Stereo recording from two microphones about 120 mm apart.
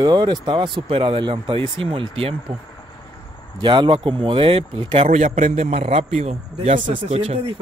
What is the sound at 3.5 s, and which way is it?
Speech, 40° right (ahead or behind).